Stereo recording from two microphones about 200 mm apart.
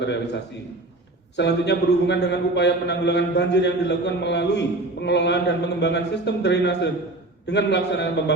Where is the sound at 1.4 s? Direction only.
60° left (ahead or behind).